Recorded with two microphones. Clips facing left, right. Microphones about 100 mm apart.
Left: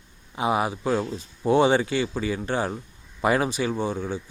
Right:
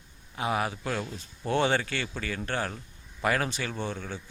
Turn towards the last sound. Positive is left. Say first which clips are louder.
# left 7 dB
turn(degrees=15)  # may be behind; listen again after turning